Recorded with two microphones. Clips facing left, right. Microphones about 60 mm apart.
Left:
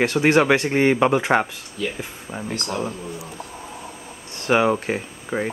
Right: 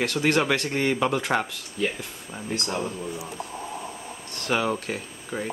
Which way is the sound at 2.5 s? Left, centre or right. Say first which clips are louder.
Even; centre.